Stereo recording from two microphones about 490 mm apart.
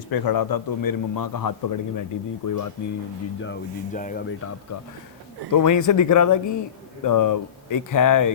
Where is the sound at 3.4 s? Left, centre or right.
Centre.